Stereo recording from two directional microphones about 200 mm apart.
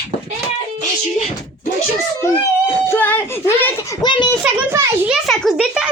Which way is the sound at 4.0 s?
20° left (ahead or behind).